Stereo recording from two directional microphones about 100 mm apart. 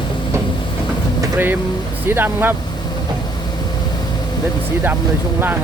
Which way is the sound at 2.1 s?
20° right (ahead or behind).